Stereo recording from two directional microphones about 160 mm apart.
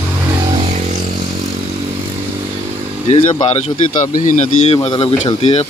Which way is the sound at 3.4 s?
40° left (ahead or behind).